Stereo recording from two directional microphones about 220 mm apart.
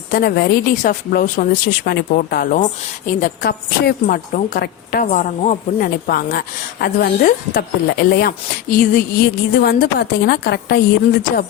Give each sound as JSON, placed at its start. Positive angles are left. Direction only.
{"t": 0.1, "sound": "a woman's voice", "side_deg": 45}